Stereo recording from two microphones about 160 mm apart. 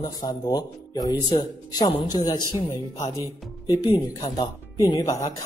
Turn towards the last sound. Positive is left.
turn(degrees=20)  # may be behind; listen again after turning